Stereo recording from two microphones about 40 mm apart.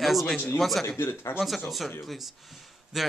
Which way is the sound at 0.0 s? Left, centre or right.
Centre.